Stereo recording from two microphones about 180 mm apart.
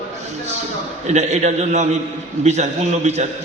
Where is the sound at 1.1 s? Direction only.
40° right (ahead or behind).